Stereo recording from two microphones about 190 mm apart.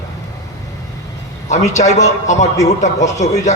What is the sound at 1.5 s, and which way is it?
A man's voice, 40° left (ahead or behind).